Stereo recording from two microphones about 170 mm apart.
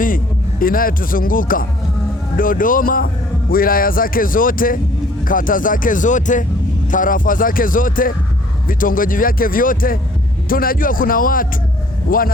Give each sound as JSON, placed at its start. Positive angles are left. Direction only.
{"t": 0.6, "sound": "speech", "side_deg": 55}